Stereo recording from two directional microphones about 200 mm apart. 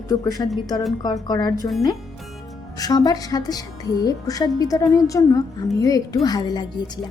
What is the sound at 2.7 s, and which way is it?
Speech, 20° left (ahead or behind).